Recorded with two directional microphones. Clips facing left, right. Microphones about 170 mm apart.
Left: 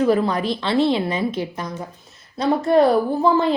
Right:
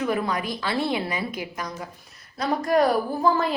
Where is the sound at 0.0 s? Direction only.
30° left (ahead or behind).